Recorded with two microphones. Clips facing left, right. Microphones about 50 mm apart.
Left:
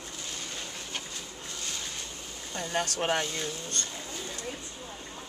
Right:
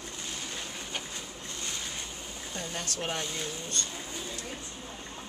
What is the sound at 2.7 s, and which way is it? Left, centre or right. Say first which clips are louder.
Speech: left 8 dB; left.